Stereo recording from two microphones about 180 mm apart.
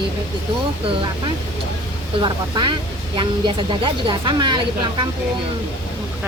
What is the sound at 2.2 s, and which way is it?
Speech, 25° right (ahead or behind).